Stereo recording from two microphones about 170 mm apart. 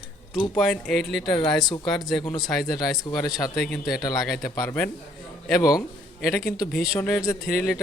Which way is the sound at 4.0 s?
20° left (ahead or behind).